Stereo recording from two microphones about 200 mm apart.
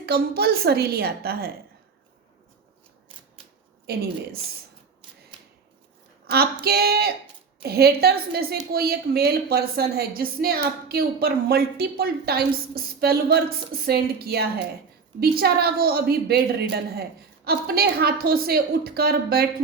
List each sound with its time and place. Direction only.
0.0 s a woman's voice: 50° right (ahead or behind)
3.9 s a woman's voice: 55° right (ahead or behind)
6.3 s a woman's voice: 50° right (ahead or behind)